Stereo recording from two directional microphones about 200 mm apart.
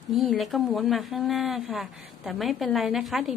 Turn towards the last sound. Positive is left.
turn(degrees=0)  # may be behind; listen again after turning